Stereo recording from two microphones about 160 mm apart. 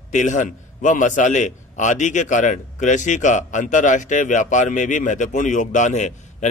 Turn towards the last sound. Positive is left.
turn(degrees=50)  # may be behind; listen again after turning